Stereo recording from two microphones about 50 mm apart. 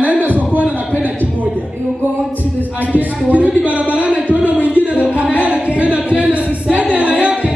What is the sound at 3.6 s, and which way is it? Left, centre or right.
Speech, right.